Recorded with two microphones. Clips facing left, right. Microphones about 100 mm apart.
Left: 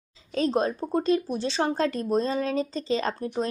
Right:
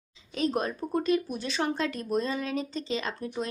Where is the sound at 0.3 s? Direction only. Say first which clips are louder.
Left 4 dB; 35° left (ahead or behind).